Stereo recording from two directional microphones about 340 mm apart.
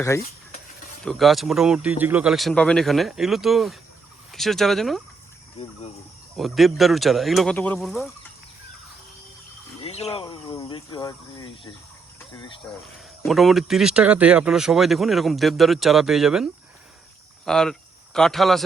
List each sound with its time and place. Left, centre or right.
1.0 s speech: centre
5.6 s speech: centre
6.3 s speech: centre
9.8 s speech: centre
12.8 s speech: centre